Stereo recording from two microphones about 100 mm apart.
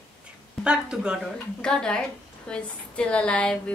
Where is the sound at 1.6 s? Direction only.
5° left (ahead or behind).